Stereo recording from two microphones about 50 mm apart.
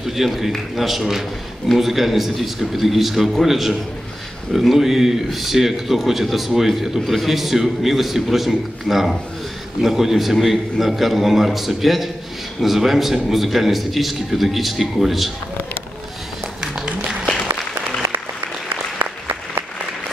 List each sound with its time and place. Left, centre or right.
0.0 s speech: centre
16.8 s applause: centre
18.9 s applause: right